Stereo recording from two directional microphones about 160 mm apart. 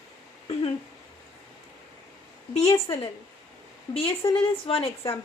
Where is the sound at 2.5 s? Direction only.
40° left (ahead or behind).